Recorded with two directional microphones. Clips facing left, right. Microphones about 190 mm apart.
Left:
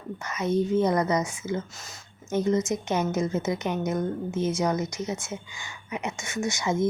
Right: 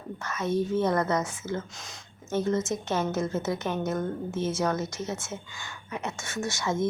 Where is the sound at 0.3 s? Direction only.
20° left (ahead or behind).